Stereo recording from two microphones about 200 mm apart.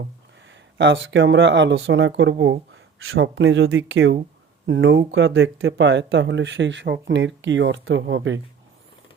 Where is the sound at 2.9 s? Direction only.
80° right.